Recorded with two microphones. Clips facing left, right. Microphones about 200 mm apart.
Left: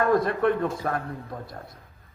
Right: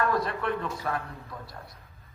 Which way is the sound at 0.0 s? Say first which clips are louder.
Left 6 dB; 50° left (ahead or behind).